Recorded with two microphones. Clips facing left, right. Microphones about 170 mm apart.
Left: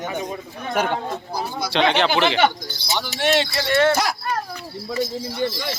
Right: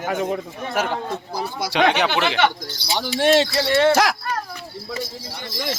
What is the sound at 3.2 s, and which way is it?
Speech, 30° right (ahead or behind).